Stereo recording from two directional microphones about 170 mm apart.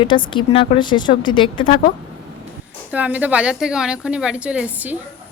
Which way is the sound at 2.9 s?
10° right (ahead or behind).